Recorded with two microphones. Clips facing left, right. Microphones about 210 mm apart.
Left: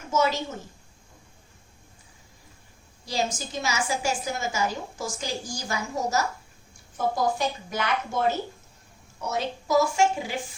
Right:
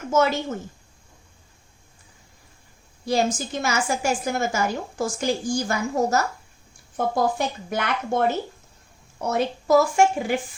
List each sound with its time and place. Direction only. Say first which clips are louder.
0.1 s a woman's voice: right 4 dB; 55° right (ahead or behind)
3.1 s a woman's voice: right 6 dB; 55° right (ahead or behind)